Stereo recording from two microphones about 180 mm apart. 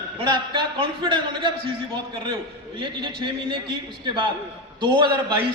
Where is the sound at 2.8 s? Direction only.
30° right (ahead or behind).